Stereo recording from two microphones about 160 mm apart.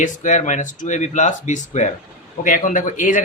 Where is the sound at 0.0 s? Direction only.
50° left (ahead or behind).